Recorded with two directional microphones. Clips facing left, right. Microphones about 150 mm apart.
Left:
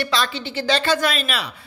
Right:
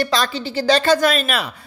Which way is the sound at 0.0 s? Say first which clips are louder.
Right 3 dB; 40° right (ahead or behind).